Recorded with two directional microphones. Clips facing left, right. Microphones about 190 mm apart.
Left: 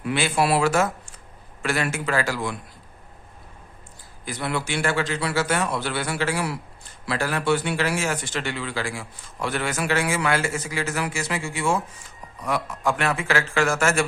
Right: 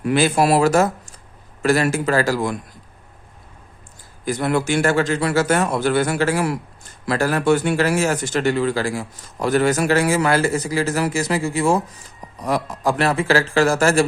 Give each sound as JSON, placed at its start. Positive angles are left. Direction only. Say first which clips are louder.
{"t": 0.0, "sound": "a man's voice", "louder": "right 6 dB", "side_deg": -40}
{"t": 4.3, "sound": "a man's voice", "louder": "right 8 dB", "side_deg": -45}